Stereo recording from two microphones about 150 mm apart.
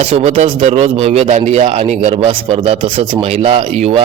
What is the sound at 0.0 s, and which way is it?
A man's voice, 45° right (ahead or behind).